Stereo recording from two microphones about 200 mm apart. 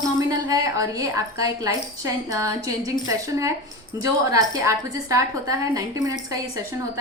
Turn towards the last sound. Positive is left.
turn(degrees=-15)  # may be behind; listen again after turning